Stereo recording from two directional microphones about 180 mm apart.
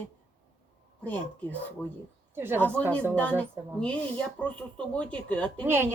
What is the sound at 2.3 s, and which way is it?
Speech, 10° right (ahead or behind).